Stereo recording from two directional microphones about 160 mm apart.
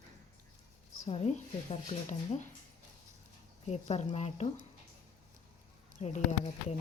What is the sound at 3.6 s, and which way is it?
Speech, 45° left (ahead or behind).